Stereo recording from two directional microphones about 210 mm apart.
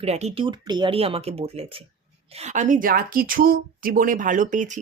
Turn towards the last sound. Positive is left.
turn(degrees=-35)  # may be behind; listen again after turning